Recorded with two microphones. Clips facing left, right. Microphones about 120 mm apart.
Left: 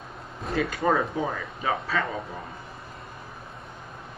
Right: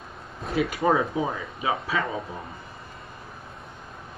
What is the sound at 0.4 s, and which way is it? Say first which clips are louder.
Speech: right 2 dB; 5° right (ahead or behind).